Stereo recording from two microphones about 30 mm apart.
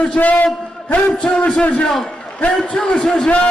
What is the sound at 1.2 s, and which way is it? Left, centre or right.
Speech, left.